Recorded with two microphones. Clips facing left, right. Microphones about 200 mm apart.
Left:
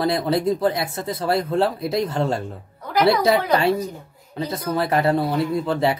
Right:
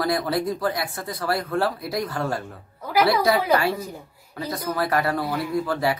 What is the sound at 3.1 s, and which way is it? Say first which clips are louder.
Speech: left 5 dB; 25° left (ahead or behind).